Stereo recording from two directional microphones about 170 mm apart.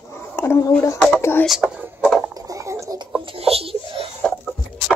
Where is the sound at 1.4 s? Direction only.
Centre (ahead or behind).